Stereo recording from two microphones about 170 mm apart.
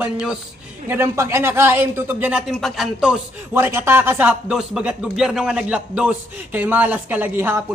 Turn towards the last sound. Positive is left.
turn(degrees=-10)  # may be behind; listen again after turning